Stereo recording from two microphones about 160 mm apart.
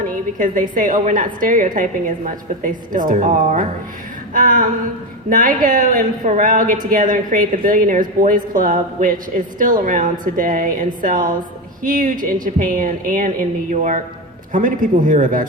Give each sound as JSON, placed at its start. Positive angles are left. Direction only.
{"t": 0.3, "sound": "a woman's voice", "side_deg": -55}